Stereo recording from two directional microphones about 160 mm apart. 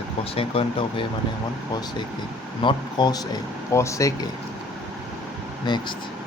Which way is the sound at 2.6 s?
30° left (ahead or behind).